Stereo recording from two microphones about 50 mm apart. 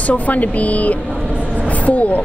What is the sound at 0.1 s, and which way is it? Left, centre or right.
A woman's voice, left.